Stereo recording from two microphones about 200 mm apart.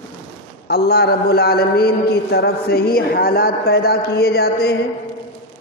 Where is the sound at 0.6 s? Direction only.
55° left (ahead or behind).